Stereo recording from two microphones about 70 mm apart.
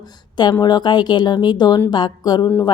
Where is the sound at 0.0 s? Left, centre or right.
Left.